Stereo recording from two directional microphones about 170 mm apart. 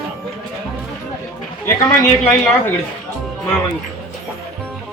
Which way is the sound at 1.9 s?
15° left (ahead or behind).